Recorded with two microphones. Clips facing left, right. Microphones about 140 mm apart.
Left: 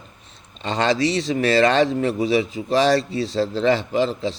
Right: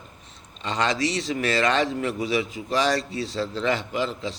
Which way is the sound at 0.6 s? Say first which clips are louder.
Left 5 dB; 30° left (ahead or behind).